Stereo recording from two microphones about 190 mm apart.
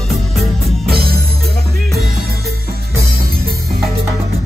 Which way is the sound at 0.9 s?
55° right (ahead or behind).